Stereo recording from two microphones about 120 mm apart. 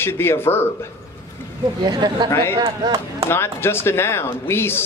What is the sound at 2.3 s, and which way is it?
Speech, 20° left (ahead or behind).